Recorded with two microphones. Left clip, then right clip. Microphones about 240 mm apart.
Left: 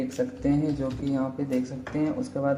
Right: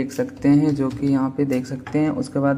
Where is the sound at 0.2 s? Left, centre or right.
Right.